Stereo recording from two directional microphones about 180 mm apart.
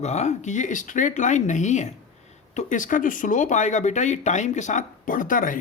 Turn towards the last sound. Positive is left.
turn(degrees=50)  # may be behind; listen again after turning